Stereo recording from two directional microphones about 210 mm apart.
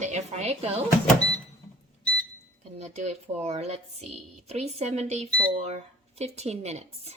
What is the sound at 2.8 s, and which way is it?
Speech, 30° right (ahead or behind).